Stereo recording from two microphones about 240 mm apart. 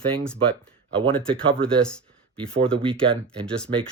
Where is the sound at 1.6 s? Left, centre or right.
Centre.